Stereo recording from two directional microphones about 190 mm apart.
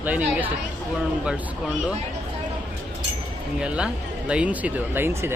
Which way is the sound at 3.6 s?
5° right (ahead or behind).